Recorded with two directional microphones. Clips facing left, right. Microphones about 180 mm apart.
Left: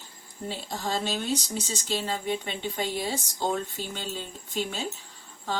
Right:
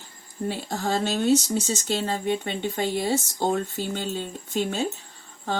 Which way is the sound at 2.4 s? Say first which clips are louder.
Right 4 dB; 60° right (ahead or behind).